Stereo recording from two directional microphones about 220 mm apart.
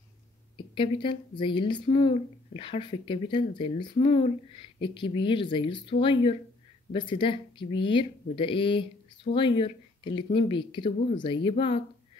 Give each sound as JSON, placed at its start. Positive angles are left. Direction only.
{"t": 0.6, "sound": "speech", "side_deg": 20}